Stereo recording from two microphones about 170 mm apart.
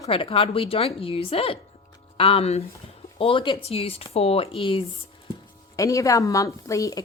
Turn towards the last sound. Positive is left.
turn(degrees=20)  # may be behind; listen again after turning